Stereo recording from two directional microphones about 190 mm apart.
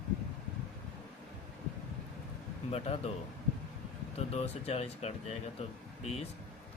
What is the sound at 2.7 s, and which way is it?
Speech, 30° left (ahead or behind).